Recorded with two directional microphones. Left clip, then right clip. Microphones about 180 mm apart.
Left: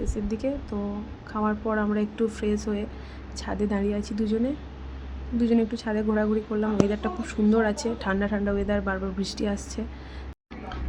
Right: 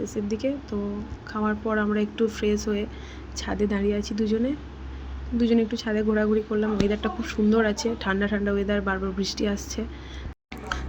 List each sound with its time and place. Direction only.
0.0 s speech: 5° left (ahead or behind)
5.4 s speech: centre (ahead or behind)
10.7 s a sound: 40° right (ahead or behind)